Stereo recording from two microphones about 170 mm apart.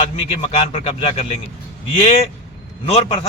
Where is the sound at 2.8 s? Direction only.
35° left (ahead or behind).